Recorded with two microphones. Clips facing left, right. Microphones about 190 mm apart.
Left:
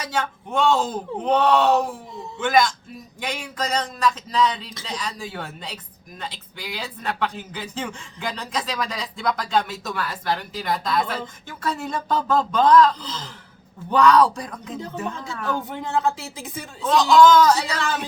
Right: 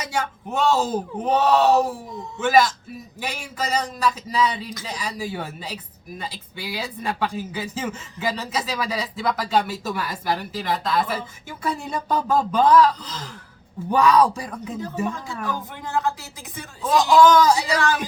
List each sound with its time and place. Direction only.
0.1 s speech: 10° right (ahead or behind)
13.9 s speech: 10° right (ahead or behind)
15.7 s speech: 25° left (ahead or behind)
16.8 s speech: 10° right (ahead or behind)